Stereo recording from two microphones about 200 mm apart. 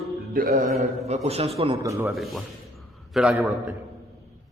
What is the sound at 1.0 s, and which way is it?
Speech, 35° right (ahead or behind).